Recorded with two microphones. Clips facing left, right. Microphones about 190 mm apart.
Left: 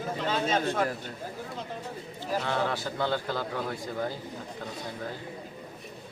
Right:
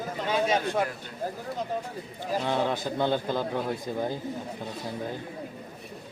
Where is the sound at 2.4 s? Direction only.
15° right (ahead or behind).